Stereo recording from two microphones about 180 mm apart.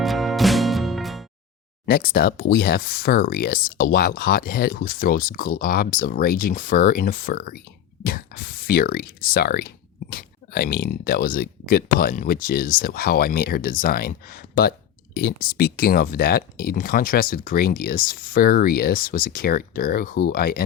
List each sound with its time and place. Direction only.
0.0 s music: centre (ahead or behind)
1.9 s speech: 55° left (ahead or behind)